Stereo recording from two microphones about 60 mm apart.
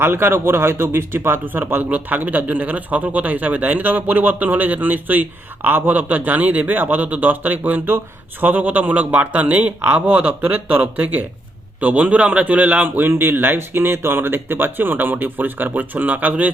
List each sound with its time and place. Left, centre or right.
0.0 s a man's voice: right